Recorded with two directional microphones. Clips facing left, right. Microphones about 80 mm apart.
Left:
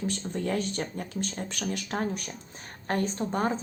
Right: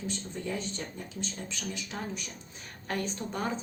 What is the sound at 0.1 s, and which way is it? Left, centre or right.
Speech, left.